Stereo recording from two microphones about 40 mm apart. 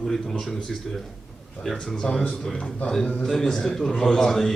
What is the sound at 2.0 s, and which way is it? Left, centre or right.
Speech, centre.